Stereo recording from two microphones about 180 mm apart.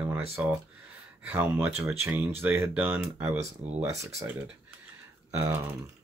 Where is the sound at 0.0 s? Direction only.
5° right (ahead or behind).